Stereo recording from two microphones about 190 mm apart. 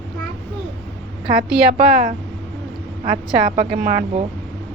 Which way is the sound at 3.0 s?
45° right (ahead or behind).